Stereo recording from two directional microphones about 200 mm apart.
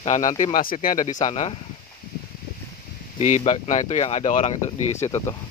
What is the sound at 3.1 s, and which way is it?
Speech, 35° left (ahead or behind).